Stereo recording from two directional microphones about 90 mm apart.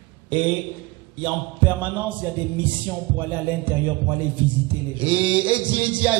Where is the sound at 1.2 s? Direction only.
15° right (ahead or behind).